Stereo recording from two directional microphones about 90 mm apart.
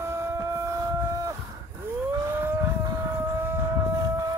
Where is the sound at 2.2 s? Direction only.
25° right (ahead or behind).